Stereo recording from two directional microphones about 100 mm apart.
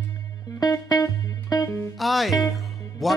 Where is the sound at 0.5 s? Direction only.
40° left (ahead or behind).